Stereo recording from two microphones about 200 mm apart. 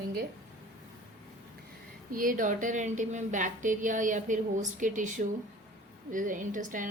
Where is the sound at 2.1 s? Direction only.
45° right (ahead or behind).